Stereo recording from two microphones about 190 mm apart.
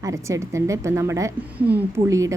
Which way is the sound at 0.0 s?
15° right (ahead or behind).